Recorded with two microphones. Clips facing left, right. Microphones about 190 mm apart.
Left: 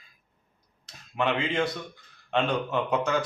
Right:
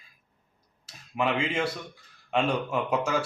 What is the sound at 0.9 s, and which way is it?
Speech, 5° right (ahead or behind).